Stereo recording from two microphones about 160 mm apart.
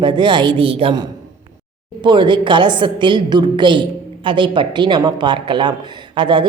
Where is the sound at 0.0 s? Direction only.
30° right (ahead or behind).